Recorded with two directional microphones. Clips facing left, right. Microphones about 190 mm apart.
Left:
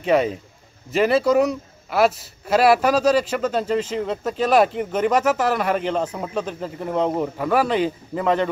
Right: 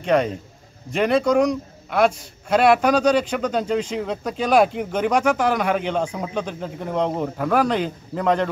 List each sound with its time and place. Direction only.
0.0 s a man's voice: 5° left (ahead or behind)